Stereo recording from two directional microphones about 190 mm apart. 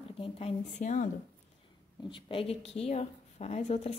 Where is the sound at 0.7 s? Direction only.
45° left (ahead or behind).